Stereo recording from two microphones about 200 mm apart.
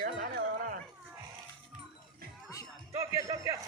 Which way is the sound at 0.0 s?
45° right (ahead or behind).